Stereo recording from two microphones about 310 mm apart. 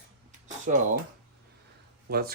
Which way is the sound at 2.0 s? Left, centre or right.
Right.